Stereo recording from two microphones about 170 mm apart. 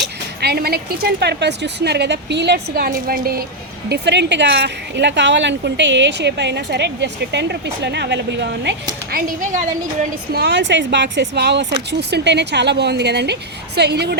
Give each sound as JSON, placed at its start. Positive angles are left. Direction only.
{"t": 0.0, "sound": "speech", "side_deg": -70}
{"t": 3.8, "sound": "speech", "side_deg": -90}
{"t": 9.1, "sound": "speech", "side_deg": -50}
{"t": 10.3, "sound": "speech", "side_deg": -85}